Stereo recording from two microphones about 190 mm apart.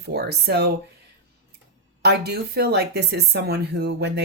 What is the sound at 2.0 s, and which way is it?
A woman's voice, 60° right (ahead or behind).